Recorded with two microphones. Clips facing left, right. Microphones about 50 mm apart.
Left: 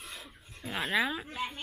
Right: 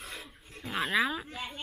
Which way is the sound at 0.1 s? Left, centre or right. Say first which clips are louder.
Right 2 dB; centre.